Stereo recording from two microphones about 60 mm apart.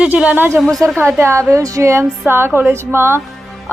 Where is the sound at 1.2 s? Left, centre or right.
Right.